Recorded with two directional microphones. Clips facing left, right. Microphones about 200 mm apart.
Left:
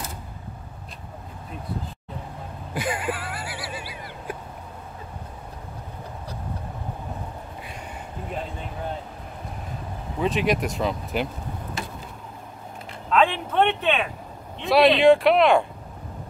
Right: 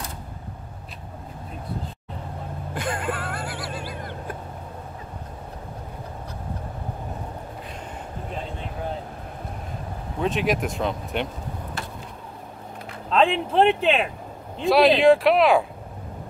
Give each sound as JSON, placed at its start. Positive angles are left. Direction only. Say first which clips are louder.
{"t": 2.7, "sound": "a sound", "louder": "left 1 dB", "side_deg": 5}
{"t": 10.2, "sound": "speech", "louder": "even", "side_deg": 0}
{"t": 13.1, "sound": "speech", "louder": "right 1 dB", "side_deg": -30}
{"t": 14.6, "sound": "speech", "louder": "even", "side_deg": 0}